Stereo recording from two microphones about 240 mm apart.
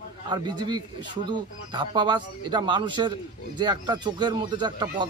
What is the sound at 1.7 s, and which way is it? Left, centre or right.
Speech, centre.